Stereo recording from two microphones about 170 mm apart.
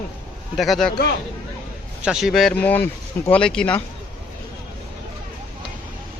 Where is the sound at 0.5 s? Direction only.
Centre (ahead or behind).